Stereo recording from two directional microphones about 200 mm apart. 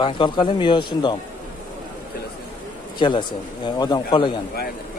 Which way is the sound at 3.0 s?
25° left (ahead or behind).